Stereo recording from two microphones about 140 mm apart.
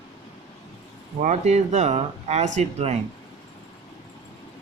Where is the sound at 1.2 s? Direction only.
55° right (ahead or behind).